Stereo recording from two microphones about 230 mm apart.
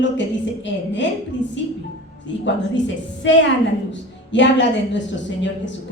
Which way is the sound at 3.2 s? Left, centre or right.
Left.